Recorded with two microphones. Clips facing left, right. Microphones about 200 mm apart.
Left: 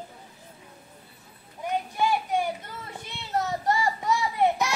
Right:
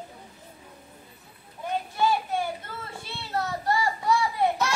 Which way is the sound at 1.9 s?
15° left (ahead or behind).